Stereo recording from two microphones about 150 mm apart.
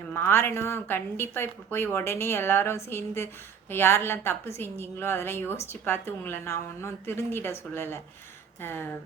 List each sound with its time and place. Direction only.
0.1 s a woman's voice: 15° left (ahead or behind)